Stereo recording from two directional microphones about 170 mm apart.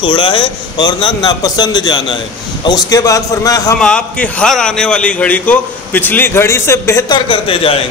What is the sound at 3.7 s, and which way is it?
A man's voice, 5° left (ahead or behind).